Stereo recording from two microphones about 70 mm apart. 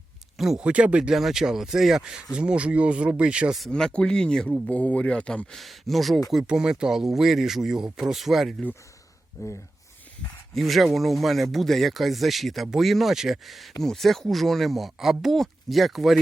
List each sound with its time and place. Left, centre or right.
0.3 s speech: centre
0.6 s speech: centre
1.1 s speech: centre
3.7 s speech: centre
5.5 s speech: centre
6.3 s speech: centre
9.4 s speech: left
10.5 s speech: centre